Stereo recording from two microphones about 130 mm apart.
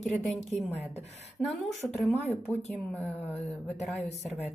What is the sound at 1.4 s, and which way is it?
A woman's voice, centre (ahead or behind).